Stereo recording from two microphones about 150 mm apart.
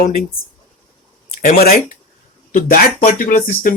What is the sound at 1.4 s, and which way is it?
Speech, 75° left (ahead or behind).